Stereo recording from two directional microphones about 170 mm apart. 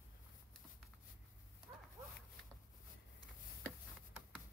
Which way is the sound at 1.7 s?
15° right (ahead or behind).